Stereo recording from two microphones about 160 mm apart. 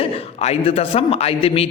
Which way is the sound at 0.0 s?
40° left (ahead or behind).